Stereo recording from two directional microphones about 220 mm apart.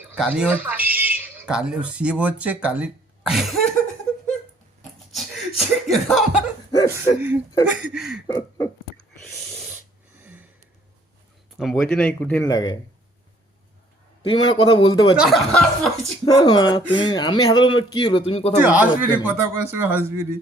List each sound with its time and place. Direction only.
0.0 s speech: 5° right (ahead or behind)
4.8 s a sound: centre (ahead or behind)
6.7 s chuckle: 15° left (ahead or behind)
7.2 s speech: 5° right (ahead or behind)
8.3 s a sound: 15° left (ahead or behind)
10.2 s a sound: 10° right (ahead or behind)
11.5 s speech: centre (ahead or behind)
12.5 s speech: 20° left (ahead or behind)
14.2 s speech: 25° left (ahead or behind)
15.1 s speech: centre (ahead or behind)
16.2 s speech: 20° left (ahead or behind)
18.6 s speech: 5° right (ahead or behind)